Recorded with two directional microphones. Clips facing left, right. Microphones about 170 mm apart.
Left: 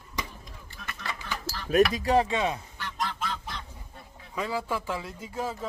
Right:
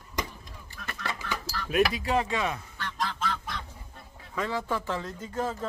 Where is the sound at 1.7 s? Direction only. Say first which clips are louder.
Left 3 dB; 40° left (ahead or behind).